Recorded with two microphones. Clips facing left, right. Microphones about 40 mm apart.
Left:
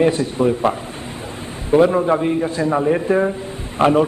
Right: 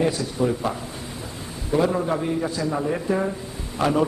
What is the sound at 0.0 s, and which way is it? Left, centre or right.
A man's voice, left.